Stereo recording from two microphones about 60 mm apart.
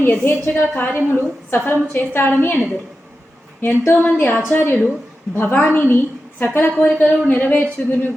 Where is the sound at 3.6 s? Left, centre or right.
Left.